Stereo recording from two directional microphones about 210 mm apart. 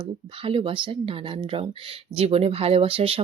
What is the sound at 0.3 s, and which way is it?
Speech, 25° right (ahead or behind).